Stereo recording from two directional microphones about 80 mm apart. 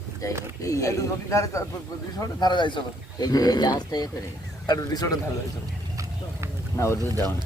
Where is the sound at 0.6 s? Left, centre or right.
Left.